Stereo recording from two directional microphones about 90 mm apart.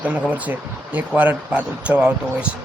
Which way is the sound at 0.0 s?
15° right (ahead or behind).